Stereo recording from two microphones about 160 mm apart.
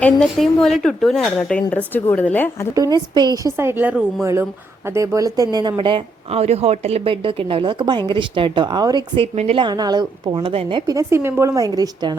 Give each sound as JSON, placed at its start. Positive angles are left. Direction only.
{"t": 0.0, "sound": "a woman's voice", "side_deg": 5}
{"t": 2.7, "sound": "a woman's voice", "side_deg": -25}
{"t": 3.6, "sound": "a woman's voice", "side_deg": -15}
{"t": 9.3, "sound": "a woman's voice", "side_deg": -45}
{"t": 9.6, "sound": "a woman's voice", "side_deg": -25}